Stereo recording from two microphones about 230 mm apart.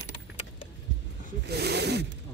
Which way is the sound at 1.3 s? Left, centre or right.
Right.